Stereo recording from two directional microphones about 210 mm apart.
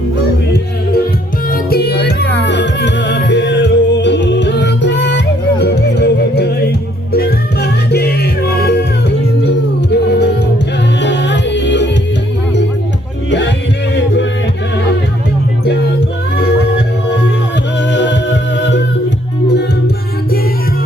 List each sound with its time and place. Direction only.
1.5 s music: 45° left (ahead or behind)
16.4 s music: 50° left (ahead or behind)
17.9 s music: 60° left (ahead or behind)